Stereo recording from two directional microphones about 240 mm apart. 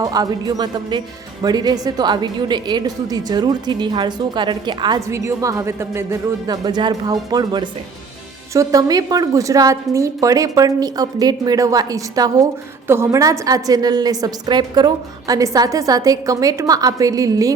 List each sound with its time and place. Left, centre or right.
0.0 s speech: centre